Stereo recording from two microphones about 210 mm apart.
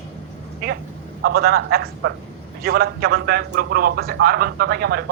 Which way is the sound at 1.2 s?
45° right (ahead or behind).